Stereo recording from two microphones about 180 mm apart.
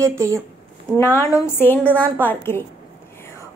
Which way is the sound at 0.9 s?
15° left (ahead or behind).